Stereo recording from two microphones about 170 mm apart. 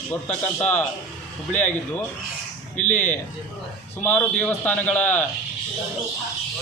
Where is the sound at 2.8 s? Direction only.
45° left (ahead or behind).